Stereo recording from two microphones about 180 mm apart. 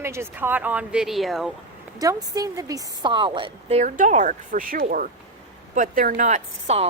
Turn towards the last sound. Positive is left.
turn(degrees=-40)  # may be behind; listen again after turning